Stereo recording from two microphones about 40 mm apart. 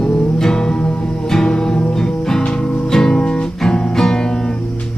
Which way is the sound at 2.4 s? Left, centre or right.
Left.